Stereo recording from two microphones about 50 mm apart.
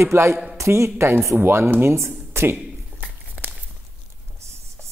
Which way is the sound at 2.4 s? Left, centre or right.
Right.